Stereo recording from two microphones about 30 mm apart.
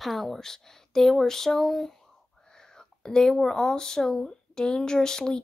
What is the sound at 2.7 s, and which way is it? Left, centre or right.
Speech, centre.